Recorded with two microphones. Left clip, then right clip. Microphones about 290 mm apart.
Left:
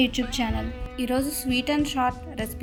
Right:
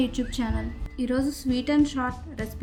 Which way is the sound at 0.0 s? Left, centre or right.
Left.